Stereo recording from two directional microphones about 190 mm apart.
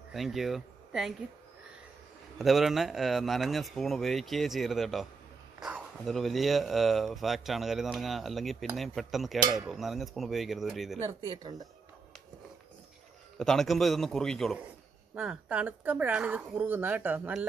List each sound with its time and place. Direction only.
0.1 s speech: centre (ahead or behind)
2.3 s speech: centre (ahead or behind)
9.4 s speech: 20° right (ahead or behind)
9.7 s speech: centre (ahead or behind)
11.1 s speech: 25° right (ahead or behind)
13.4 s speech: centre (ahead or behind)